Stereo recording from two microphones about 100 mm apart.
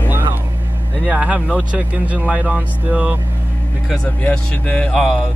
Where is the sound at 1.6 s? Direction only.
15° right (ahead or behind).